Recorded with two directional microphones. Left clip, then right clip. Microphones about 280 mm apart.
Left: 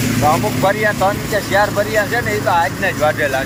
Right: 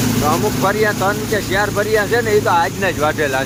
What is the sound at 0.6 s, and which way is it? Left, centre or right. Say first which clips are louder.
Speech: left 2 dB; centre.